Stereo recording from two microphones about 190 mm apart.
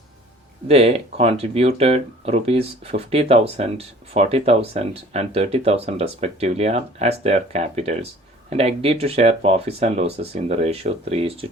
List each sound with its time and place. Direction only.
0.7 s speech: 30° right (ahead or behind)